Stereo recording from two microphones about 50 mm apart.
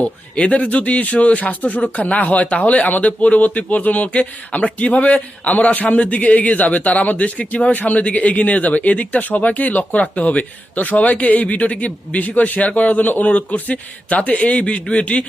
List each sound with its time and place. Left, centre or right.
0.0 s a man's voice: left
14.2 s a man's voice: centre